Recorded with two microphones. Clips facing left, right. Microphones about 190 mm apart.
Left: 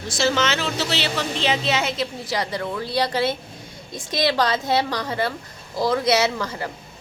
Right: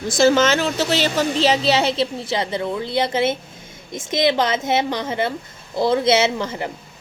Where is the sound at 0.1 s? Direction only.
50° right (ahead or behind).